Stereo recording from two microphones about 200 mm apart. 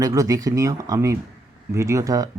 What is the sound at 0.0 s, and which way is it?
Speech, 15° right (ahead or behind).